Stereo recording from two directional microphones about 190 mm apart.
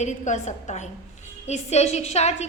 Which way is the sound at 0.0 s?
35° left (ahead or behind).